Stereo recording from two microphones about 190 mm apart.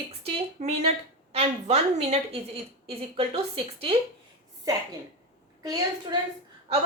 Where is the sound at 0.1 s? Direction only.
30° right (ahead or behind).